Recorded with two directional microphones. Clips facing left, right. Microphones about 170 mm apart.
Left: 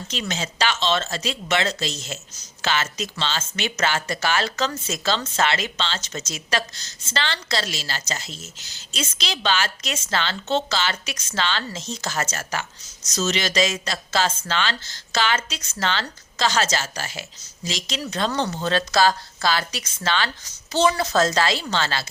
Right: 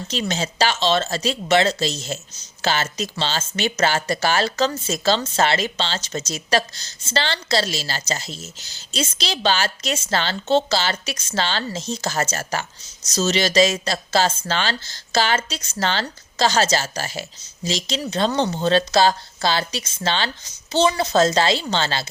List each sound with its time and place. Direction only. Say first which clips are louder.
0.1 s speech: right 4 dB; 35° right (ahead or behind)